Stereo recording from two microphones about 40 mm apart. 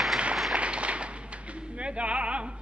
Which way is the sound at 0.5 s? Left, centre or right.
Right.